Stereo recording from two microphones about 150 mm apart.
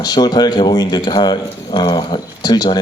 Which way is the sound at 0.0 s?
25° left (ahead or behind).